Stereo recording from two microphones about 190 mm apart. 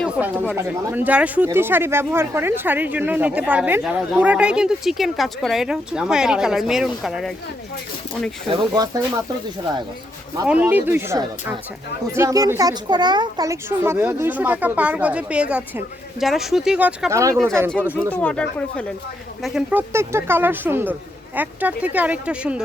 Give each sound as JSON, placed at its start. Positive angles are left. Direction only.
{"t": 0.2, "sound": "speech", "side_deg": -10}
{"t": 8.4, "sound": "speech", "side_deg": -20}
{"t": 10.4, "sound": "speech", "side_deg": -5}
{"t": 18.1, "sound": "speech", "side_deg": 5}
{"t": 19.9, "sound": "speech", "side_deg": -15}